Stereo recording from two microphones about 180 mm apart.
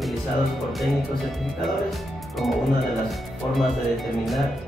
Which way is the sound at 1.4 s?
Centre (ahead or behind).